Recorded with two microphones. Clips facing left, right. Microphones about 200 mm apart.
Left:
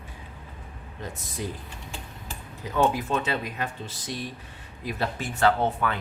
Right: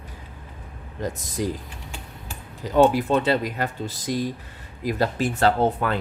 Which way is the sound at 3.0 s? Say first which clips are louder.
Right 7 dB; 35° right (ahead or behind).